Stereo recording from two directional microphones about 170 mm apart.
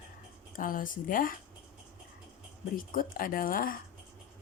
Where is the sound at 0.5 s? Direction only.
55° left (ahead or behind).